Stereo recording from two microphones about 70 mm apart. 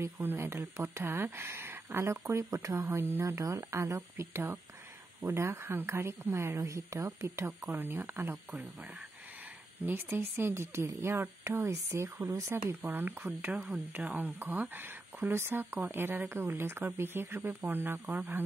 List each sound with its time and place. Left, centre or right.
0.0 s speech: right
3.3 s speech: right
7.6 s speech: right
9.8 s speech: right